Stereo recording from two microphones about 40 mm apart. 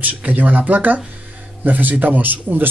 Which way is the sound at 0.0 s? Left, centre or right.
Right.